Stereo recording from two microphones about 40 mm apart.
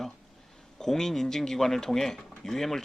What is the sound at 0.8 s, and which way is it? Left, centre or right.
Speech, centre.